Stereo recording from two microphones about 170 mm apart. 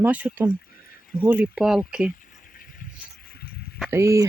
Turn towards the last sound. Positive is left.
turn(degrees=-15)  # may be behind; listen again after turning